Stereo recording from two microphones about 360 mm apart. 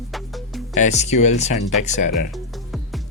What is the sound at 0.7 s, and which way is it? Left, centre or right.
Speech, centre.